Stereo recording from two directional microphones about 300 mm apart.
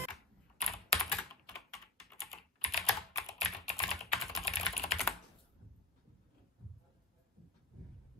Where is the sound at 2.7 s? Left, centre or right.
Centre.